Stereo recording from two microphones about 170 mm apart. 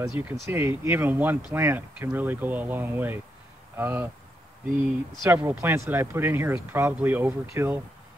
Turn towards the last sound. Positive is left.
turn(degrees=-15)  # may be behind; listen again after turning